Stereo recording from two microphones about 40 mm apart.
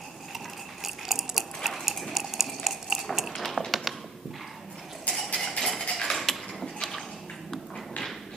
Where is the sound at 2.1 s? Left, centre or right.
Centre.